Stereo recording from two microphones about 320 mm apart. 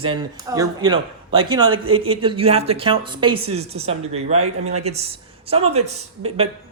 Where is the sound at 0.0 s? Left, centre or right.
Centre.